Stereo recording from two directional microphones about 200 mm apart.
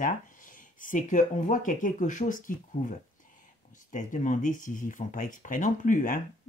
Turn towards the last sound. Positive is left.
turn(degrees=40)  # may be behind; listen again after turning